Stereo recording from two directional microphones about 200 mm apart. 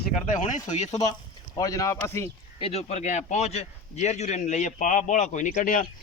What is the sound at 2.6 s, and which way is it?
A man's voice, 30° left (ahead or behind).